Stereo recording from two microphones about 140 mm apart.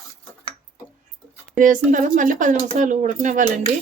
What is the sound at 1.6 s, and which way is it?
Speech, 70° right (ahead or behind).